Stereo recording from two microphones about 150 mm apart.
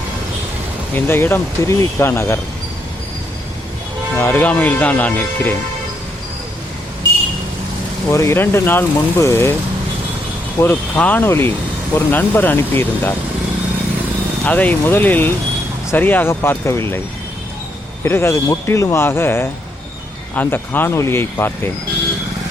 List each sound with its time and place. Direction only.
0.9 s speech: 15° left (ahead or behind)
4.2 s speech: 10° left (ahead or behind)
8.1 s speech: 20° left (ahead or behind)
10.6 s speech: 10° left (ahead or behind)
14.4 s speech: 10° left (ahead or behind)
18.0 s speech: 15° left (ahead or behind)